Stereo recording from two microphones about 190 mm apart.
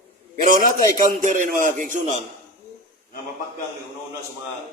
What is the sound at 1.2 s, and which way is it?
A man's voice, 40° right (ahead or behind).